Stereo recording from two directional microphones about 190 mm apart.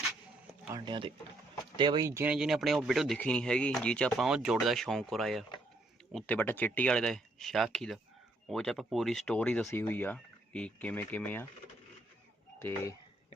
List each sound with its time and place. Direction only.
0.7 s speech: 25° right (ahead or behind); by 11.4 s 10° left (ahead or behind)
12.5 s speech: 15° left (ahead or behind)